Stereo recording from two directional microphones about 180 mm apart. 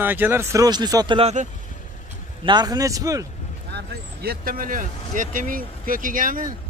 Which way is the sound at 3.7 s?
60° right (ahead or behind).